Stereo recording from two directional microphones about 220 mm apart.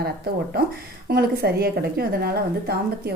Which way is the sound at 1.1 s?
45° right (ahead or behind).